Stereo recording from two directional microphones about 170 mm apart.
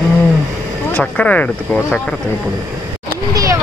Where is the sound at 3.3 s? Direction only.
15° right (ahead or behind).